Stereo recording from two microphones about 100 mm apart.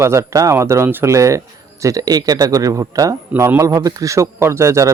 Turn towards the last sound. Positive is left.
turn(degrees=-30)  # may be behind; listen again after turning